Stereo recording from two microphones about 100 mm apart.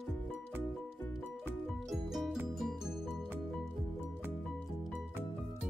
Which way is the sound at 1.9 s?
Centre (ahead or behind).